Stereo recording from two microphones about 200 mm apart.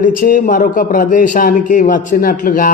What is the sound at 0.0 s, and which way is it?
A man's voice, 45° left (ahead or behind).